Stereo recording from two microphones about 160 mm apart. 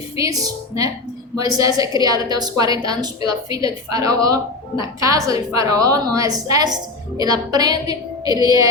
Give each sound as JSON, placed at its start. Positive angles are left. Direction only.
{"t": 0.2, "sound": "a woman's voice", "side_deg": -20}